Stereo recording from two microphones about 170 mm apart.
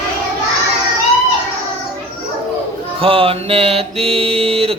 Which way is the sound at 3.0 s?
35° right (ahead or behind).